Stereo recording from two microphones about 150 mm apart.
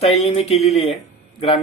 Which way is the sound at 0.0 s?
45° left (ahead or behind).